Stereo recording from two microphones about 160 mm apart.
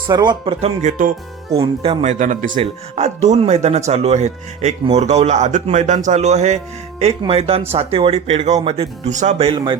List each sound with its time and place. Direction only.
0.1 s speech: 25° right (ahead or behind)
0.6 s speech: 45° right (ahead or behind)
1.5 s speech: 35° right (ahead or behind)
2.1 s speech: 55° right (ahead or behind)
2.5 s speech: 40° right (ahead or behind)